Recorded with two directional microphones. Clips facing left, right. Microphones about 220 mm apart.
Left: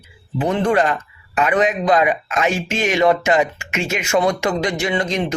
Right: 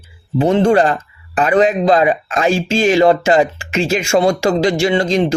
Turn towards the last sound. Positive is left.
turn(degrees=-30)  # may be behind; listen again after turning